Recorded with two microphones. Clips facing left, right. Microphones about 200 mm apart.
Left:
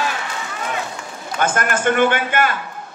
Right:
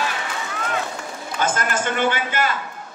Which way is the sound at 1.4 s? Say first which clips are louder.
Left 3 dB; 55° left (ahead or behind).